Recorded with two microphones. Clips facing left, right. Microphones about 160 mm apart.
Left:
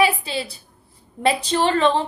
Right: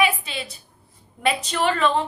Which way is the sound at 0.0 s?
35° left (ahead or behind).